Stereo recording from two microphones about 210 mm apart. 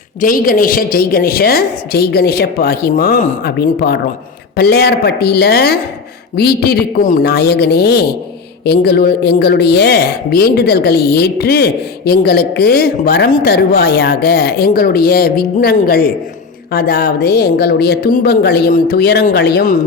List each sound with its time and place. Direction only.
0.2 s a woman's voice: 40° left (ahead or behind)